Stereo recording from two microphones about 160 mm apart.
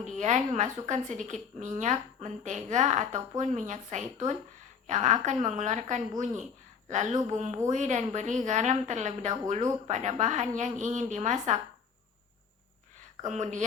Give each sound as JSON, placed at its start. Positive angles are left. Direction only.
{"t": 0.0, "sound": "a woman's voice", "side_deg": -50}
{"t": 13.2, "sound": "a woman's voice", "side_deg": -45}